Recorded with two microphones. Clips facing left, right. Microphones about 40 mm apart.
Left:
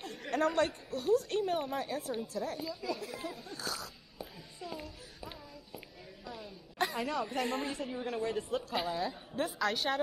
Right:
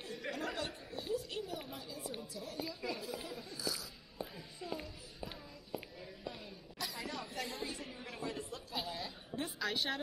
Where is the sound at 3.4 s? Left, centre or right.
Left.